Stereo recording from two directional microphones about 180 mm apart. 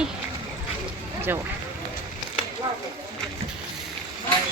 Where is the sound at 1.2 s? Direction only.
15° right (ahead or behind).